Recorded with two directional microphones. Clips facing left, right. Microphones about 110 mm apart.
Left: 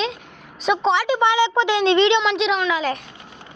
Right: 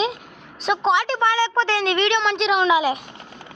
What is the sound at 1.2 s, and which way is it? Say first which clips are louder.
A woman's voice: left 2 dB; 15° left (ahead or behind).